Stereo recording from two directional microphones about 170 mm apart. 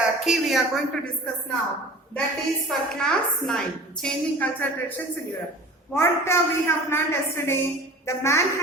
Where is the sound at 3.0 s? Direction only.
5° left (ahead or behind).